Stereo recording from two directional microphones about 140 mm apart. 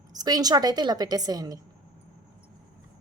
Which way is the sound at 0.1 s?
25° right (ahead or behind).